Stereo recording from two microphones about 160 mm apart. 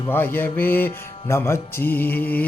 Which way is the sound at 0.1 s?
15° left (ahead or behind).